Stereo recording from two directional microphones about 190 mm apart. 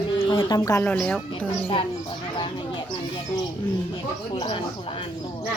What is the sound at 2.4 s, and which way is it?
A woman's voice, 25° left (ahead or behind).